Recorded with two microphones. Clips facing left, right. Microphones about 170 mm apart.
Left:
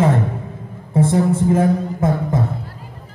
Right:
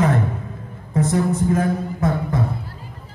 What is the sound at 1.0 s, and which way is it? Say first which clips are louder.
A man's voice: left 3 dB; 30° left (ahead or behind).